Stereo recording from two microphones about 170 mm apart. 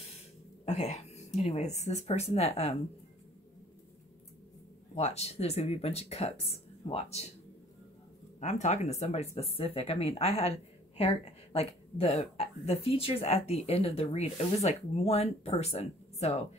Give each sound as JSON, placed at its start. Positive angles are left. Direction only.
{"t": 0.7, "sound": "speech", "side_deg": 40}
{"t": 4.9, "sound": "speech", "side_deg": 40}
{"t": 8.4, "sound": "speech", "side_deg": 45}